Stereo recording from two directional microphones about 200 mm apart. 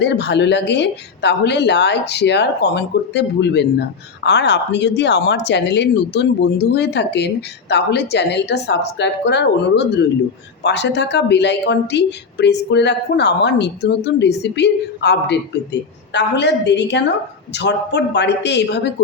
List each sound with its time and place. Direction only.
0.0 s speech: 60° left (ahead or behind)